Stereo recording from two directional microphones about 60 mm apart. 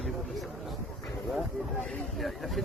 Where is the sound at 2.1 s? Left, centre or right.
Centre.